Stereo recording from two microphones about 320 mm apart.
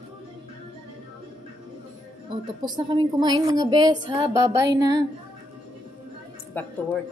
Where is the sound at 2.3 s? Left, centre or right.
Centre.